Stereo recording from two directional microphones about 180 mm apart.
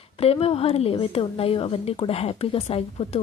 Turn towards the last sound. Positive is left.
turn(degrees=35)  # may be behind; listen again after turning